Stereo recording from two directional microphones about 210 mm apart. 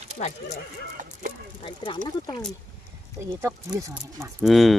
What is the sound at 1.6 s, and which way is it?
Speech, 25° left (ahead or behind).